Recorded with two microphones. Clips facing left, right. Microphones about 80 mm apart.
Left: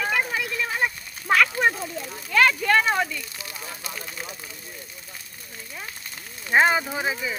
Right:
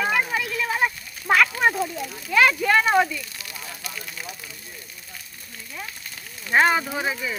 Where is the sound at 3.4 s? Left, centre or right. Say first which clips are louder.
Left 1 dB; left.